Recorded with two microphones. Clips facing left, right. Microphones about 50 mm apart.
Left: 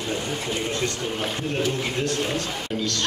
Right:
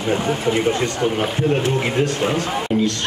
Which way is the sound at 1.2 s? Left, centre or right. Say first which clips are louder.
Right 3 dB; right.